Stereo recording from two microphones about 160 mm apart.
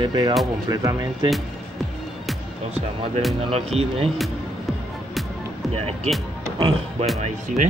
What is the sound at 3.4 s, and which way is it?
Speech, 40° right (ahead or behind).